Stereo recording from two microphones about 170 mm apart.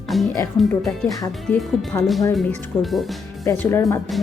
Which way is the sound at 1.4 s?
Centre (ahead or behind).